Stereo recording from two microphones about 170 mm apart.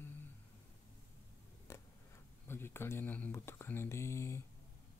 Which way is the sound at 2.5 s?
15° left (ahead or behind).